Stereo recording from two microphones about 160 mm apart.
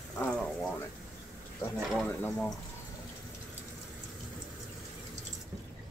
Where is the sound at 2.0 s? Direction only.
10° left (ahead or behind).